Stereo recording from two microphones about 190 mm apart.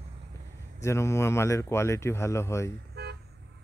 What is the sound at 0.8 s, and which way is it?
A man's voice, 15° left (ahead or behind).